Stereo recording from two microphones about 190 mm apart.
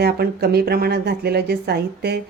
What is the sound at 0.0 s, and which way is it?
Speech, 55° right (ahead or behind).